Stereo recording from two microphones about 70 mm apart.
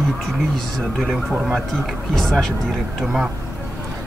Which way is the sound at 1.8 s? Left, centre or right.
Centre.